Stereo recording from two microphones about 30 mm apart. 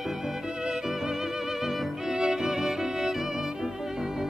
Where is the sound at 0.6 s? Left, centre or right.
Right.